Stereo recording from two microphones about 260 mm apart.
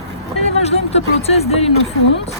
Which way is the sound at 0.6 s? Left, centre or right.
Left.